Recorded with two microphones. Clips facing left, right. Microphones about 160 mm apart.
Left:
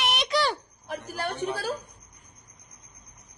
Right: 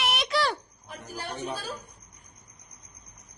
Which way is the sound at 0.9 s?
70° left (ahead or behind).